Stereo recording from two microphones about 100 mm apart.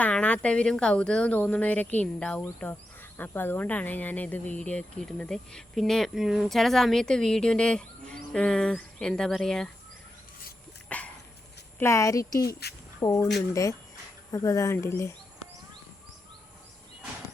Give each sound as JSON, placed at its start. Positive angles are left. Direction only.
{"t": 0.0, "sound": "speech", "side_deg": 15}
{"t": 10.8, "sound": "dog", "side_deg": 15}
{"t": 11.8, "sound": "speech", "side_deg": 30}